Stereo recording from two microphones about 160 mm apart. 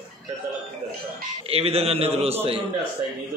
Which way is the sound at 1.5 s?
40° right (ahead or behind).